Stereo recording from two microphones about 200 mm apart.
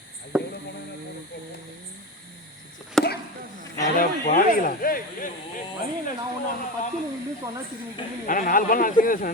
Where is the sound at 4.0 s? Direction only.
40° left (ahead or behind).